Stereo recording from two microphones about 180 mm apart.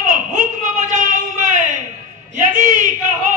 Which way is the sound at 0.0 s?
45° right (ahead or behind).